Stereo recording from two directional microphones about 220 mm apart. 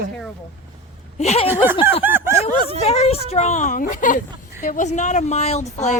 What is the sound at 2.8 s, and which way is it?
A woman's voice, 30° left (ahead or behind).